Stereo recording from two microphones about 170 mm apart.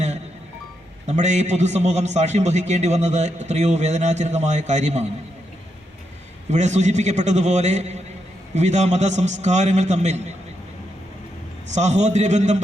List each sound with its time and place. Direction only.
1.0 s a man's voice: 45° right (ahead or behind)
6.5 s a man's voice: 45° right (ahead or behind)
11.7 s a man's voice: 40° right (ahead or behind)